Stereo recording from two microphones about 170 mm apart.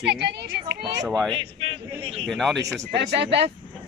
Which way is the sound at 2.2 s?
Centre (ahead or behind).